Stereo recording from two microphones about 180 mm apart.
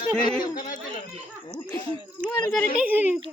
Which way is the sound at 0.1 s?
5° left (ahead or behind).